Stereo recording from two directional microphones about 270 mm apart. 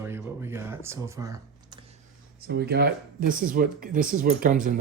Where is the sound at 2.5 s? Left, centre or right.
Right.